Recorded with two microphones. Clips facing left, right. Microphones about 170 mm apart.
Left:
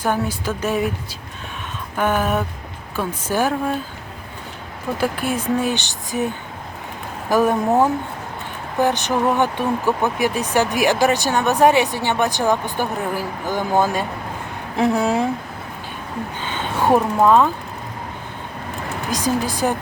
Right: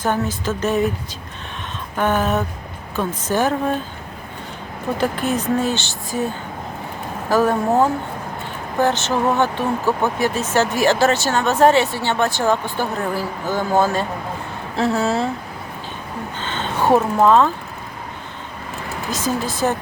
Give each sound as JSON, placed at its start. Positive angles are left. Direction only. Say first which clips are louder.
{"t": 0.0, "sound": "speech", "louder": "even", "side_deg": 10}
{"t": 2.0, "sound": "speech", "louder": "right 1 dB", "side_deg": 10}
{"t": 4.9, "sound": "speech", "louder": "right 1 dB", "side_deg": 10}
{"t": 8.8, "sound": "speech", "louder": "even", "side_deg": 15}
{"t": 16.4, "sound": "a sound", "louder": "right 1 dB", "side_deg": 10}
{"t": 17.2, "sound": "speech", "louder": "even", "side_deg": 10}
{"t": 19.1, "sound": "speech", "louder": "left 2 dB", "side_deg": 15}